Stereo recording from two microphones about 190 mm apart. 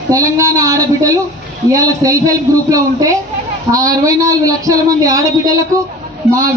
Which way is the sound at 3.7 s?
15° right (ahead or behind).